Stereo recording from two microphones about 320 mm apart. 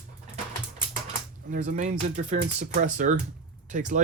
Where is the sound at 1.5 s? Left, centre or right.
Right.